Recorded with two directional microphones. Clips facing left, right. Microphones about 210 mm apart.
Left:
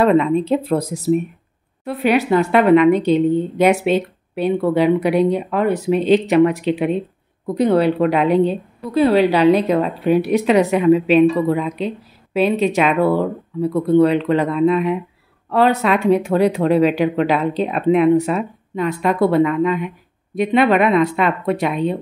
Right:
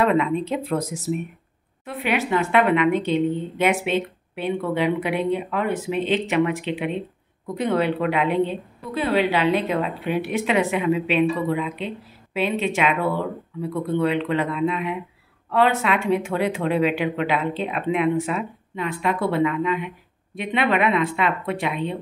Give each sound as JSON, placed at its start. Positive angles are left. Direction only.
{"t": 0.0, "sound": "speech", "side_deg": 35}